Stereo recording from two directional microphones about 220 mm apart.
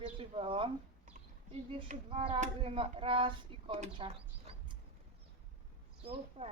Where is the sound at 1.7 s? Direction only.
25° right (ahead or behind).